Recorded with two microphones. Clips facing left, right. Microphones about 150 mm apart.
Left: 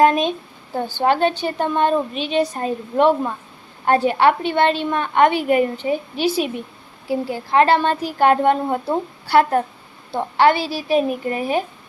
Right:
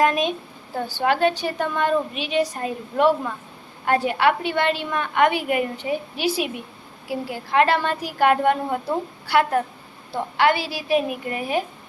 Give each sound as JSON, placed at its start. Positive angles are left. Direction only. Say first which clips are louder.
{"t": 0.0, "sound": "a woman's voice", "louder": "left 5 dB", "side_deg": 30}